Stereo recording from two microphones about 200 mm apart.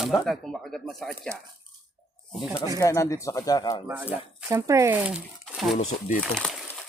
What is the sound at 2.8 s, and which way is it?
Speech, 15° left (ahead or behind).